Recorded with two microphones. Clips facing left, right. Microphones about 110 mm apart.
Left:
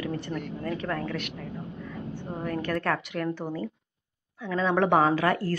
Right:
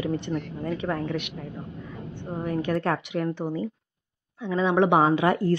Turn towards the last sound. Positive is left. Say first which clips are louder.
# right 2 dB
turn(degrees=-20)  # may be behind; listen again after turning